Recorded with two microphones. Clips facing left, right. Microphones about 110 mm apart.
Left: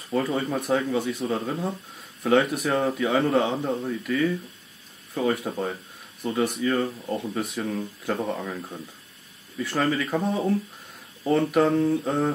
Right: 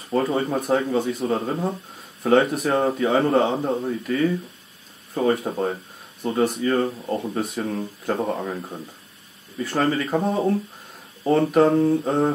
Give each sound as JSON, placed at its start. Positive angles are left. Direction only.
{"t": 0.1, "sound": "a man's voice", "side_deg": -30}
{"t": 2.2, "sound": "a man's voice", "side_deg": -35}
{"t": 7.4, "sound": "speech", "side_deg": -35}
{"t": 7.7, "sound": "a man's voice", "side_deg": -20}